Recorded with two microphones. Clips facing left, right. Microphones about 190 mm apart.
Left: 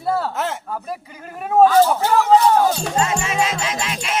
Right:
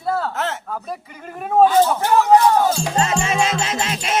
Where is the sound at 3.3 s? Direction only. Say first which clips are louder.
Right 1 dB; 40° right (ahead or behind).